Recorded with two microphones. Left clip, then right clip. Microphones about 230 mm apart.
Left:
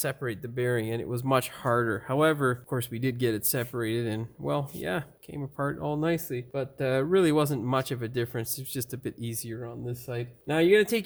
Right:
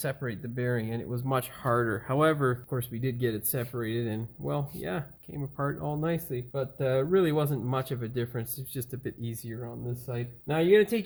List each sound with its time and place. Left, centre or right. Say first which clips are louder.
0.0 s speech: left 2 dB; left
1.6 s speech: left 1 dB; left
2.6 s speech: left 3 dB; left